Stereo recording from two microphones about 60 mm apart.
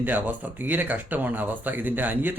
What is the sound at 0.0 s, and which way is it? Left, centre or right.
Speech, right.